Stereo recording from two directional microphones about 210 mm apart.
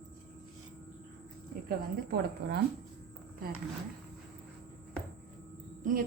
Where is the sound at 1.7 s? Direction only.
50° right (ahead or behind).